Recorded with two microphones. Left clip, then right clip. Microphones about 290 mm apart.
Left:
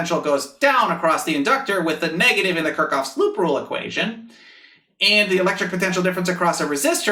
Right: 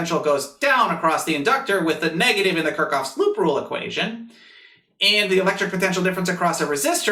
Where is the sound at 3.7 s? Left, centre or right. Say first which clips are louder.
Left 1 dB; left.